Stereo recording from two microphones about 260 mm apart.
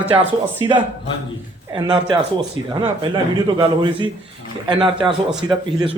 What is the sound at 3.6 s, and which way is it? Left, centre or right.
A man's voice, centre.